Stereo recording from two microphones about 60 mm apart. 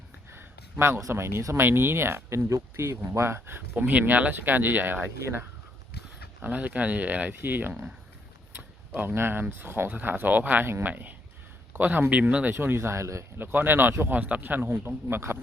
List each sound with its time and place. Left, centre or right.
0.3 s speech: right
1.6 s speech: right
3.8 s speech: right
12.5 s speech: right
13.4 s speech: right
14.2 s speech: right